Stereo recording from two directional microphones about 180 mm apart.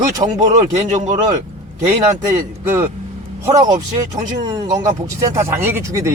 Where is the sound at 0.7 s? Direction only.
45° right (ahead or behind).